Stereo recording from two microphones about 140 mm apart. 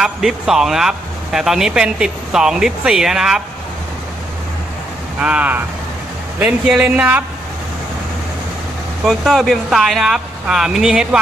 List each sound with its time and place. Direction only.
0.0 s speech: 5° right (ahead or behind)
5.2 s speech: 10° right (ahead or behind)
9.0 s speech: centre (ahead or behind)